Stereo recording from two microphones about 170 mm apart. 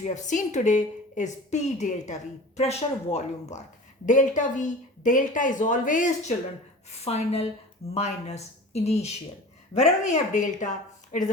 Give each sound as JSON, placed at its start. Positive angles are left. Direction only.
{"t": 0.0, "sound": "a woman's voice", "side_deg": 45}
{"t": 7.0, "sound": "a woman's voice", "side_deg": 35}